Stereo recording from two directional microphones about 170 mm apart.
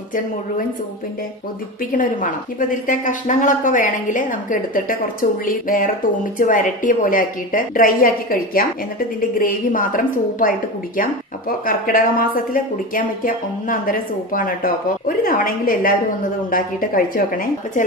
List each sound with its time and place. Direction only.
1.8 s a woman's voice: 55° left (ahead or behind)